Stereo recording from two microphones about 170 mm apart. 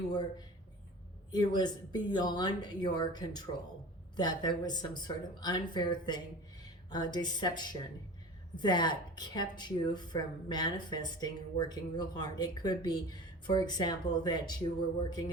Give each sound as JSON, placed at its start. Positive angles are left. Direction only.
{"t": 0.1, "sound": "a woman's voice", "side_deg": 25}